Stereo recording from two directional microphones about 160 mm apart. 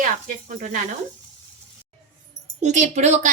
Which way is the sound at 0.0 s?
55° right (ahead or behind).